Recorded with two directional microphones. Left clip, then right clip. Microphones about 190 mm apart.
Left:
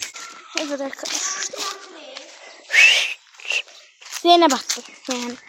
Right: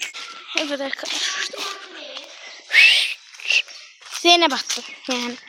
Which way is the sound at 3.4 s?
40° left (ahead or behind).